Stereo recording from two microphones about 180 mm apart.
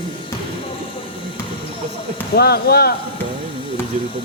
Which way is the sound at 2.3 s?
60° left (ahead or behind).